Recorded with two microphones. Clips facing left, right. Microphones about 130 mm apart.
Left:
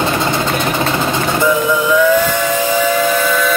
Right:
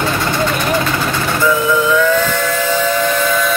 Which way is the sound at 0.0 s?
25° left (ahead or behind).